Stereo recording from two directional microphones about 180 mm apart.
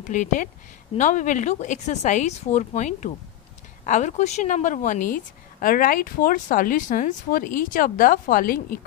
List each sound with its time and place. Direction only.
0.0 s a woman's voice: 45° left (ahead or behind)